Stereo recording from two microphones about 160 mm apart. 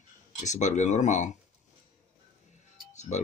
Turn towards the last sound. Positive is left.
turn(degrees=45)  # may be behind; listen again after turning